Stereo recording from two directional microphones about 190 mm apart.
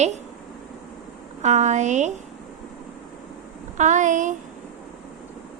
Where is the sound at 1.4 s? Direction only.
40° right (ahead or behind).